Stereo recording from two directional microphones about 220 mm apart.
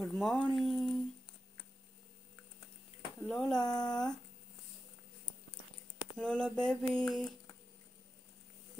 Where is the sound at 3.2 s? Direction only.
Centre (ahead or behind).